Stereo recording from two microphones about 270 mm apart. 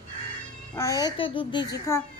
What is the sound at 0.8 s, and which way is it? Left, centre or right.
Speech, centre.